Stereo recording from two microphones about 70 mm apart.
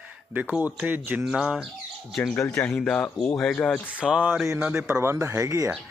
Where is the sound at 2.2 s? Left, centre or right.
Centre.